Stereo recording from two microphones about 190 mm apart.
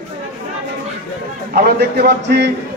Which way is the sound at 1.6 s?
55° right (ahead or behind).